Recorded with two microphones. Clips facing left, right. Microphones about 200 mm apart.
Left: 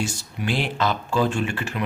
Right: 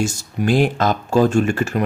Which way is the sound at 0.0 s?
45° right (ahead or behind).